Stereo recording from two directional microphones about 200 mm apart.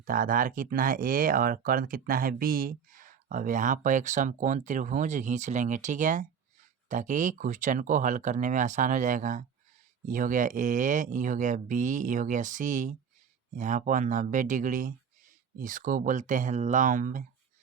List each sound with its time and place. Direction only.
0.0 s speech: 40° right (ahead or behind)